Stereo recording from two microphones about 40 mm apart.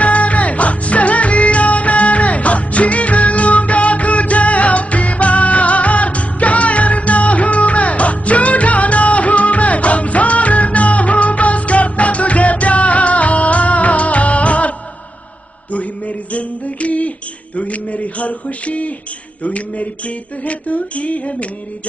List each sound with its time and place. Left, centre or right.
0.0 s music: left
15.7 s a sound: left
19.4 s music: left